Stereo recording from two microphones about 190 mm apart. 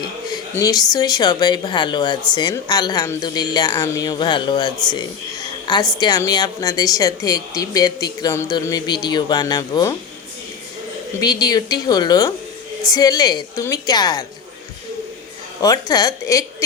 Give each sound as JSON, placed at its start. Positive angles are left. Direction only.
{"t": 0.5, "sound": "speech", "side_deg": 20}
{"t": 11.2, "sound": "speech", "side_deg": 20}
{"t": 15.6, "sound": "speech", "side_deg": 20}